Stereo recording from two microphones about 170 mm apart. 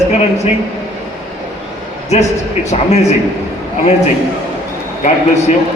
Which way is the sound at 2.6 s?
40° left (ahead or behind).